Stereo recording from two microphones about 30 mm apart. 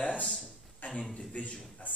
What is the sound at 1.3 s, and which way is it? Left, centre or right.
Speech, left.